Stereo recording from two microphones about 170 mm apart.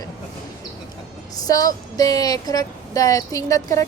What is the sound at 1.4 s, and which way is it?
Speech, 20° left (ahead or behind).